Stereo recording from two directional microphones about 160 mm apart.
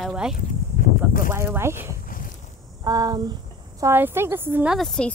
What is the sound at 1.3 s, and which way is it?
Speech, 15° right (ahead or behind).